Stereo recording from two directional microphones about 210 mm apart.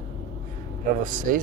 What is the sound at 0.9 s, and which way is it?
Speech, 40° right (ahead or behind).